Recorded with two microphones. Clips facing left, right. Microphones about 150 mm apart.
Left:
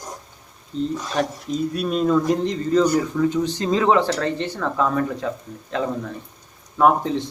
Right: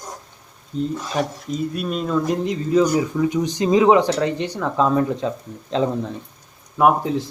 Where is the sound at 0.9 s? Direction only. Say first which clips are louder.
Even; 5° right (ahead or behind); by 5.3 s 20° right (ahead or behind).